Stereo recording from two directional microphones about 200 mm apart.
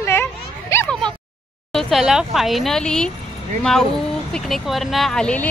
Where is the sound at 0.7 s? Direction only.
15° left (ahead or behind).